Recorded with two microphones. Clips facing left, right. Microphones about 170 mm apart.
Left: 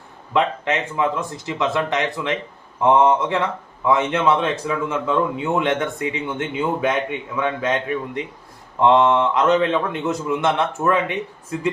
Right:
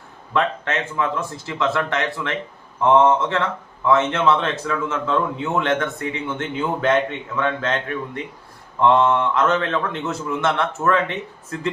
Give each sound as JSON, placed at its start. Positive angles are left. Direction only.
{"t": 0.3, "sound": "speech", "side_deg": 15}